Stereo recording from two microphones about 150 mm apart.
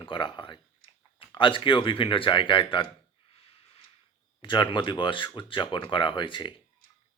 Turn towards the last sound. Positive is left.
turn(degrees=30)  # may be behind; listen again after turning